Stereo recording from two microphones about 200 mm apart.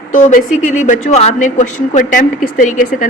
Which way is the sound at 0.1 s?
40° left (ahead or behind).